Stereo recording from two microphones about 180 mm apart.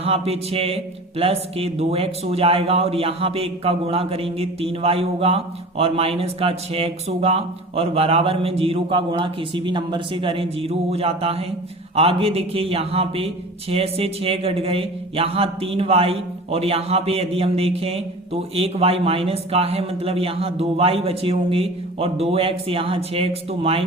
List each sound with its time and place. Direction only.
0.0 s speech: 35° right (ahead or behind)